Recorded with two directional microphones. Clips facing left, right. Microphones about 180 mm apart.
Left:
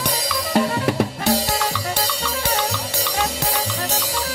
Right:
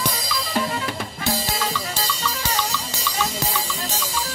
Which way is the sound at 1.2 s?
70° left (ahead or behind).